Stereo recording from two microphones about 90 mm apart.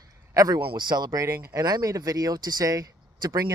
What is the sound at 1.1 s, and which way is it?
Speech, 30° right (ahead or behind).